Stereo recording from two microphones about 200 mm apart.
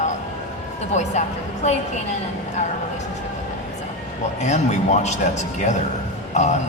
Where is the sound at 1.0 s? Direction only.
35° left (ahead or behind).